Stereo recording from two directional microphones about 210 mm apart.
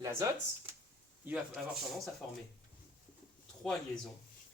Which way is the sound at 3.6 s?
5° left (ahead or behind).